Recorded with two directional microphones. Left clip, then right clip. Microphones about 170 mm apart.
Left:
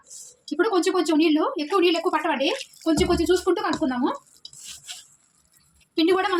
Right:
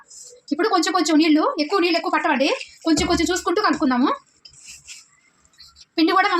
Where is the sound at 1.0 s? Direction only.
40° right (ahead or behind).